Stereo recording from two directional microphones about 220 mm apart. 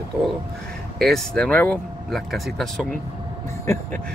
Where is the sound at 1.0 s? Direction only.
5° left (ahead or behind).